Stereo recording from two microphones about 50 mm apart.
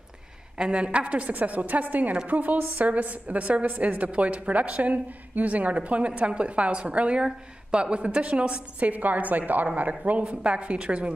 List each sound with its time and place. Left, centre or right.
0.6 s a woman's voice: centre